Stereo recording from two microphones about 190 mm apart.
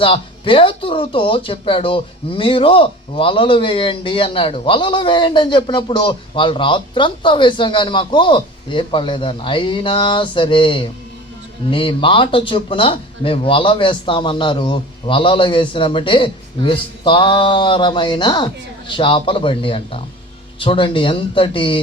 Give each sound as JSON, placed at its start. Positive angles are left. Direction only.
{"t": 0.0, "sound": "speech", "side_deg": 30}